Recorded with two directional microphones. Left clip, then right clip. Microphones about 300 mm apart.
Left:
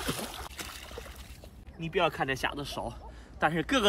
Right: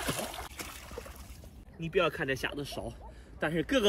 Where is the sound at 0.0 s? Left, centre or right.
Right.